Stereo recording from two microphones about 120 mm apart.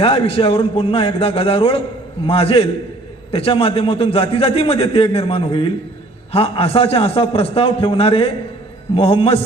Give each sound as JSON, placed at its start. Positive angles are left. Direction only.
{"t": 0.0, "sound": "a man's voice", "side_deg": 50}